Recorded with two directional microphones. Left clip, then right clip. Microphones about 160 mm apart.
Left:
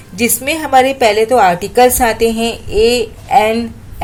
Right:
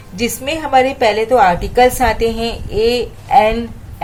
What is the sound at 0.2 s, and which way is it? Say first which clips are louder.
A woman's voice: left 3 dB; 30° left (ahead or behind).